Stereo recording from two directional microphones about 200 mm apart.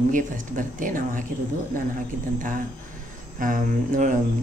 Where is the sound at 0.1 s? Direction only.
40° right (ahead or behind).